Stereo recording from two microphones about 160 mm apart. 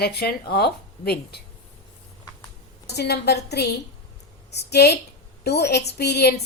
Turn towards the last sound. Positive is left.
turn(degrees=90)